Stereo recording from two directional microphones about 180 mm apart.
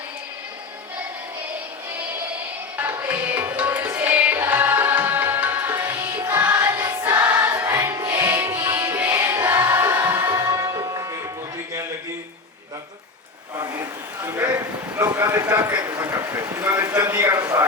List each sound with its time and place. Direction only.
2.7 s music: 10° right (ahead or behind)
13.6 s a sound: 15° right (ahead or behind)
15.5 s a man's voice: 20° right (ahead or behind)